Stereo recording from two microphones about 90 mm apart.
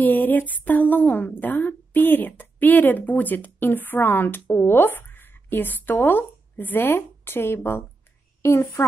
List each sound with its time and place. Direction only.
0.0 s a child's voice: 20° left (ahead or behind)